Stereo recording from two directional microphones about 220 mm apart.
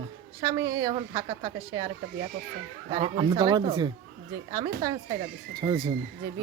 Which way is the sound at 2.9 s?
25° right (ahead or behind).